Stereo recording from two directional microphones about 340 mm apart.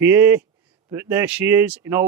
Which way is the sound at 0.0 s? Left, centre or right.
Centre.